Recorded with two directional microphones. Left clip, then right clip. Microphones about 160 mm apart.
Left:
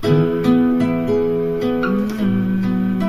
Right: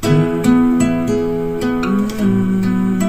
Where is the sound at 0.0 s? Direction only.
25° right (ahead or behind).